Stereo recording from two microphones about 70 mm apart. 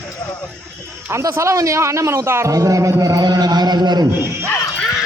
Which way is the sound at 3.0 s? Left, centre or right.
Right.